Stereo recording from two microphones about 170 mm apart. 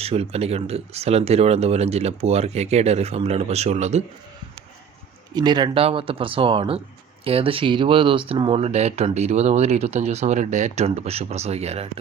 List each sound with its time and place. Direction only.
0.0 s speech: 35° right (ahead or behind)
5.3 s speech: 25° right (ahead or behind)